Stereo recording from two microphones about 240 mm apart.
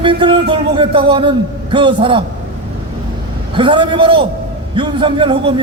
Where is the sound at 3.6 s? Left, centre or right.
Centre.